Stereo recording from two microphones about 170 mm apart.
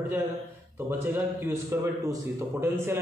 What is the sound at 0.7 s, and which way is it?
A man's voice, 15° right (ahead or behind).